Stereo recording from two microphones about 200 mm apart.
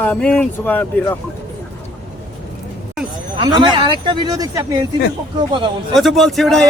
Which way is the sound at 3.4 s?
20° right (ahead or behind).